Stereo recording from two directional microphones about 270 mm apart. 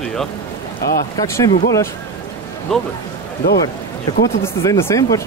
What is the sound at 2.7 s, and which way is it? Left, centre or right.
Speech, centre.